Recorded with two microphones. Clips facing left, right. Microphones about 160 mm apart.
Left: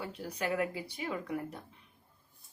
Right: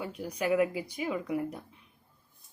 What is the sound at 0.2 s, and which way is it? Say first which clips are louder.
Speech: right 7 dB; 15° right (ahead or behind).